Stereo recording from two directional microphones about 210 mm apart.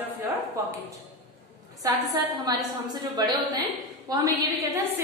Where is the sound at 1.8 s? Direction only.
20° right (ahead or behind).